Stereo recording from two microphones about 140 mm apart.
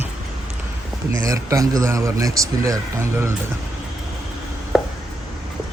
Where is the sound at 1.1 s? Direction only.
25° right (ahead or behind).